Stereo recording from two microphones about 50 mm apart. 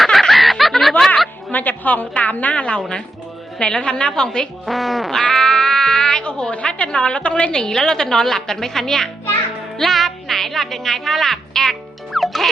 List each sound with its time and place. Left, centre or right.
0.0 s snicker: centre
1.5 s a woman's voice: left; by 4.4 s centre
4.6 s speech: centre